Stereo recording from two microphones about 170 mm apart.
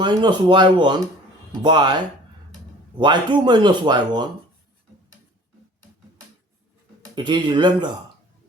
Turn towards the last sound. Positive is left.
turn(degrees=-25)  # may be behind; listen again after turning